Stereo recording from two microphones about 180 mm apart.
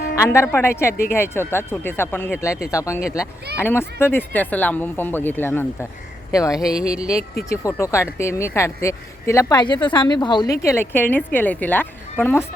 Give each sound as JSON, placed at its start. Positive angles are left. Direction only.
{"t": 0.3, "sound": "speech", "side_deg": 15}
{"t": 6.6, "sound": "a sound", "side_deg": -5}
{"t": 7.5, "sound": "speech", "side_deg": 15}